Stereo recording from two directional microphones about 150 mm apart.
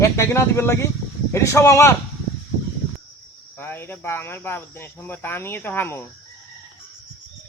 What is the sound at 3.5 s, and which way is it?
Speech, 15° left (ahead or behind).